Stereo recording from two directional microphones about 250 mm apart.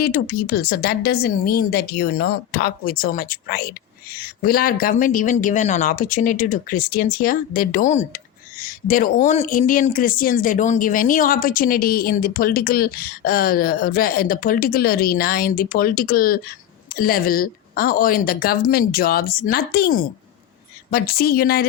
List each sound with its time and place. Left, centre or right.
0.0 s speech: left